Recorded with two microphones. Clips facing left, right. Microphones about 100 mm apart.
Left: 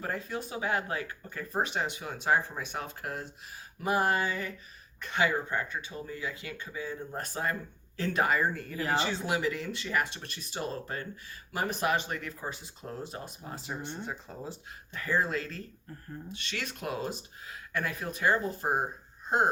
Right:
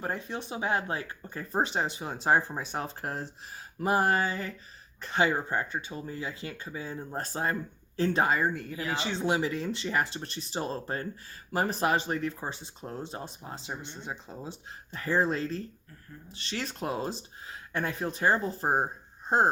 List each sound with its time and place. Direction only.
0.0 s speech: 25° right (ahead or behind)